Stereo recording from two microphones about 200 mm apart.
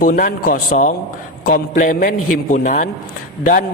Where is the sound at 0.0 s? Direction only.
40° left (ahead or behind).